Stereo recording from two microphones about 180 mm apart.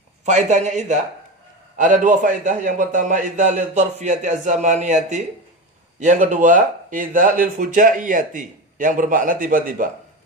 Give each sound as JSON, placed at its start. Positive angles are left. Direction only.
{"t": 0.3, "sound": "speech", "side_deg": -40}